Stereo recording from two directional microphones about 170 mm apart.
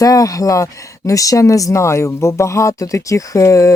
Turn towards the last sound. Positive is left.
turn(degrees=20)  # may be behind; listen again after turning